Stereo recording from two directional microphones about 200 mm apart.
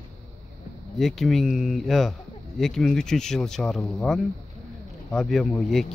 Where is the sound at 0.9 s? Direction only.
Centre (ahead or behind).